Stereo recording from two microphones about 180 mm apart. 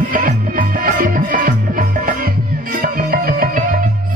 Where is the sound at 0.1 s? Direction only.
50° right (ahead or behind).